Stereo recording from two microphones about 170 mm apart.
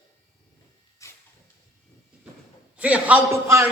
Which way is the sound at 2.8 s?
10° right (ahead or behind).